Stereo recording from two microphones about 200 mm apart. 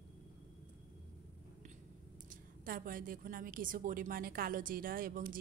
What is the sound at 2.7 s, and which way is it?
A woman's voice, 45° right (ahead or behind).